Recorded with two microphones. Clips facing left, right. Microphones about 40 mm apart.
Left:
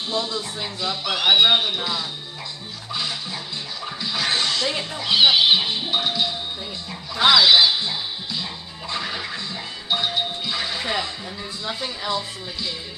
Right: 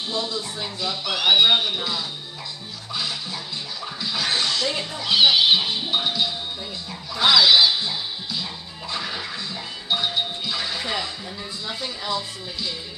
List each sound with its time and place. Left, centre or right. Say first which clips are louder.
0.1 s speech: left 2 dB; centre
2.9 s music: left 1 dB; centre
4.6 s speech: left 1 dB; centre
7.2 s music: left 1 dB; centre
11.6 s speech: left 3 dB; left